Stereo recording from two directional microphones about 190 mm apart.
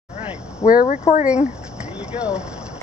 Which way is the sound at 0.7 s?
45° left (ahead or behind).